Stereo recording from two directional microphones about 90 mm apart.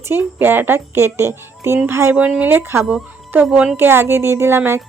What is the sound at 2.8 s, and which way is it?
Speech, 15° right (ahead or behind).